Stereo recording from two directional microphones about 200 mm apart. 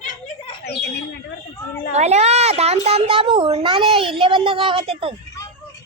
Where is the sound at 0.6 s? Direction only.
55° left (ahead or behind).